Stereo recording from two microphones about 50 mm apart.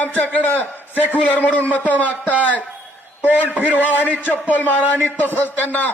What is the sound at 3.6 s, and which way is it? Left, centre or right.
A man's voice, left.